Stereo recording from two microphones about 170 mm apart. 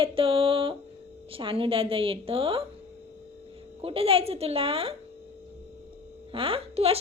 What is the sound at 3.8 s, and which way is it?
A woman's voice, 35° right (ahead or behind).